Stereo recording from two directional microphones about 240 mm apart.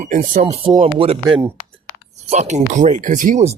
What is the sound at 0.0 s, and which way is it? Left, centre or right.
Speech, right.